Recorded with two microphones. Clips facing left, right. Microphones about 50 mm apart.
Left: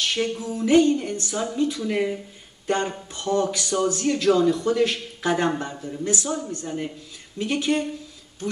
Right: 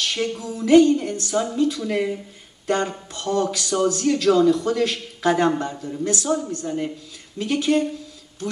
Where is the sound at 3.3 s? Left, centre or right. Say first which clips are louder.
Even; centre.